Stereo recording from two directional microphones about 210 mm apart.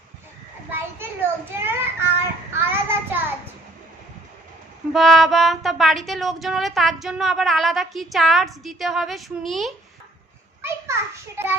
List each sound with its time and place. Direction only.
0.7 s child singing: 10° right (ahead or behind)
4.9 s speech: centre (ahead or behind)
10.6 s children playing: 10° right (ahead or behind)